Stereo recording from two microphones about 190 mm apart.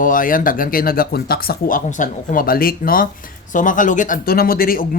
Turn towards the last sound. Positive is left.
turn(degrees=50)  # may be behind; listen again after turning